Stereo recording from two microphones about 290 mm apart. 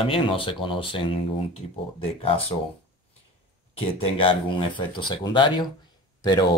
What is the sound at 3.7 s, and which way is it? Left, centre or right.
Speech, centre.